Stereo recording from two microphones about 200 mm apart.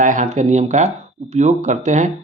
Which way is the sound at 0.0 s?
40° right (ahead or behind).